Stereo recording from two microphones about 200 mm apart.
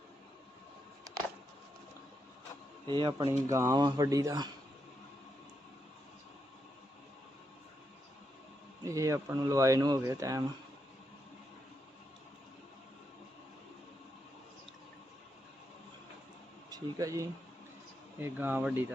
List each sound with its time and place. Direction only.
2.8 s speech: 25° right (ahead or behind)
8.8 s speech: 15° right (ahead or behind)
16.6 s speech: 20° right (ahead or behind)